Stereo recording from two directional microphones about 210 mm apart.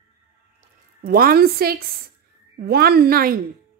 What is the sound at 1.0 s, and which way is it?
A woman's voice, 45° right (ahead or behind).